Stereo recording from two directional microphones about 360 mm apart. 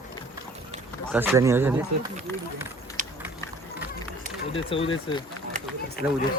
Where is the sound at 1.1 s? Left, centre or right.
Centre.